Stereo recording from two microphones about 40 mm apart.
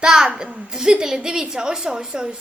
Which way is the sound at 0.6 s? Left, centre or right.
Centre.